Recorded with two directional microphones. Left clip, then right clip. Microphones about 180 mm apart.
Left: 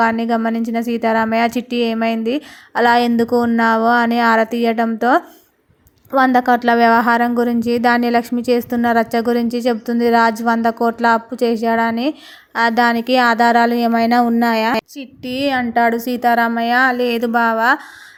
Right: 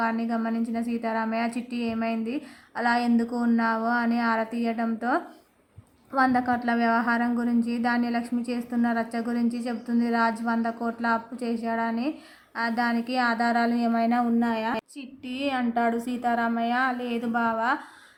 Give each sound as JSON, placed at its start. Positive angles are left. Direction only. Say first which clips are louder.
{"t": 0.0, "sound": "a woman's voice", "louder": "left 11 dB", "side_deg": 35}